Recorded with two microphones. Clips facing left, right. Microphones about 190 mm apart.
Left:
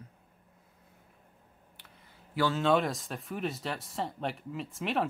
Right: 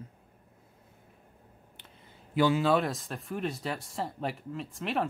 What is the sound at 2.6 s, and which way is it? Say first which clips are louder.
Speech: even; centre (ahead or behind).